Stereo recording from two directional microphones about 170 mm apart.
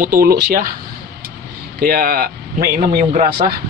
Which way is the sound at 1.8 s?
60° right (ahead or behind).